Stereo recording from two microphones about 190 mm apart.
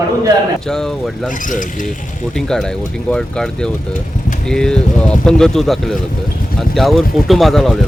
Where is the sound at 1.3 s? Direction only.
45° left (ahead or behind).